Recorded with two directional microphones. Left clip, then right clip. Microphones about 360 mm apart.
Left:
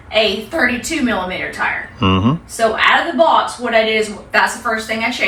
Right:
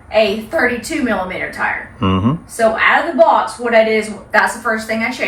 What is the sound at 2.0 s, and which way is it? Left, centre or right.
Speech, centre.